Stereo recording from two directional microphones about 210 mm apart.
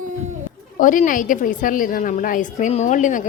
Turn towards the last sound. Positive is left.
turn(degrees=35)  # may be behind; listen again after turning